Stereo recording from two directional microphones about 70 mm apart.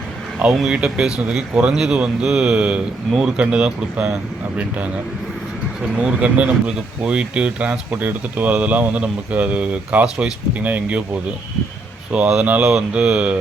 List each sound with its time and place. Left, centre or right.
0.5 s speech: centre
6.0 s speech: centre
12.1 s speech: centre